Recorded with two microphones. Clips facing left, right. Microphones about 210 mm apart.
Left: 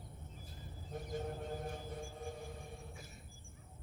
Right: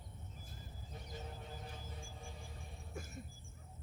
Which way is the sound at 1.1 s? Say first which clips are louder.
Left 9 dB; 50° left (ahead or behind).